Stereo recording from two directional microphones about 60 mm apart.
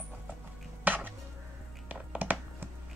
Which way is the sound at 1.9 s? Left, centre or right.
Right.